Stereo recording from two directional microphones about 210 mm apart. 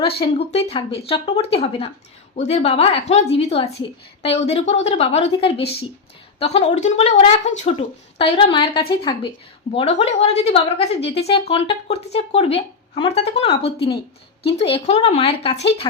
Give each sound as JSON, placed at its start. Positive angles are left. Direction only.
{"t": 0.2, "sound": "a woman's voice", "side_deg": 30}